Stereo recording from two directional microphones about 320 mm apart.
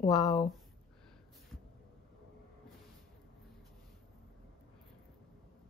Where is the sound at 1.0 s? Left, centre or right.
Centre.